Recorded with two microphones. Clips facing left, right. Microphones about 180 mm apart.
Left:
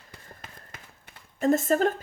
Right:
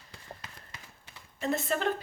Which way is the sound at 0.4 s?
50° left (ahead or behind).